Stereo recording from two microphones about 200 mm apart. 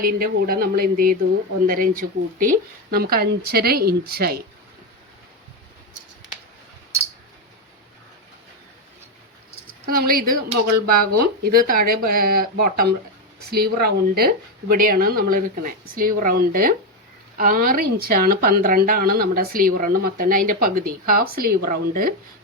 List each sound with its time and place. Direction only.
0.0 s speech: 45° right (ahead or behind)
9.8 s speech: 45° right (ahead or behind)